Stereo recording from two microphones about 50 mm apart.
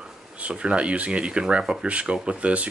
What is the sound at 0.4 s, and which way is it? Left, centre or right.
Speech, right.